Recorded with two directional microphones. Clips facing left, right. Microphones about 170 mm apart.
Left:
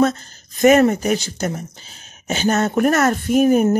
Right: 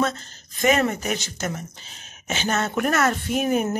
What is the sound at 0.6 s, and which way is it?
Speech, 45° left (ahead or behind).